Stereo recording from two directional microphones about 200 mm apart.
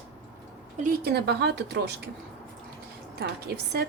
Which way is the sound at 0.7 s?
45° right (ahead or behind).